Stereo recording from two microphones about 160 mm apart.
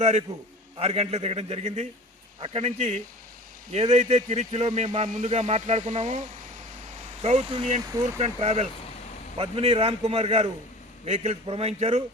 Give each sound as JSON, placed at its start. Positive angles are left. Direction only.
{"t": 0.0, "sound": "a man's voice", "side_deg": -45}
{"t": 7.8, "sound": "speech", "side_deg": -25}
{"t": 8.0, "sound": "a man's voice", "side_deg": -40}